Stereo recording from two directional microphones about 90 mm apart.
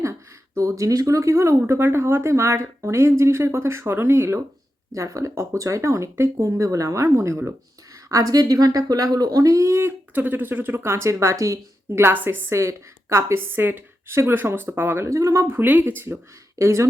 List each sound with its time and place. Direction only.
0.0 s speech: 35° right (ahead or behind)
10.2 s a woman's voice: 20° right (ahead or behind)